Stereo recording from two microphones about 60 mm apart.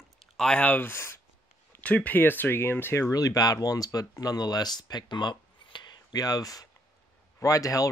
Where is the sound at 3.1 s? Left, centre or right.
Left.